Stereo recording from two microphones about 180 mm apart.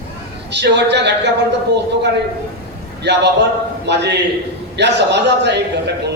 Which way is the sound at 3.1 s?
70° right (ahead or behind).